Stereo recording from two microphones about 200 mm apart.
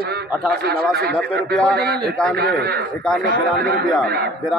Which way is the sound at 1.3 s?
5° left (ahead or behind).